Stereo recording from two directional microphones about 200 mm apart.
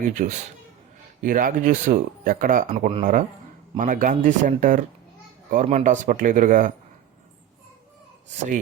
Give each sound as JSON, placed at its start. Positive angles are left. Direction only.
{"t": 0.1, "sound": "speech", "side_deg": -40}